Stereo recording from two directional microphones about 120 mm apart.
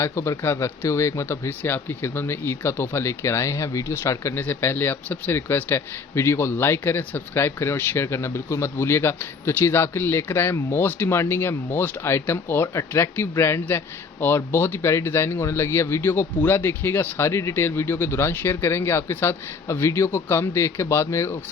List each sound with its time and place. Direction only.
0.0 s speech: 25° left (ahead or behind)